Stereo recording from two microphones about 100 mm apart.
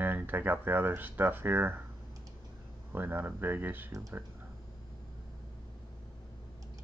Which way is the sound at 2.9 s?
20° right (ahead or behind).